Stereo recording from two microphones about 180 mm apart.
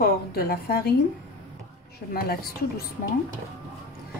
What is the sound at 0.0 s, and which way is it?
Speech, 55° left (ahead or behind).